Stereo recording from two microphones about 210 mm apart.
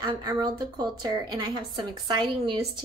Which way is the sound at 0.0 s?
20° right (ahead or behind).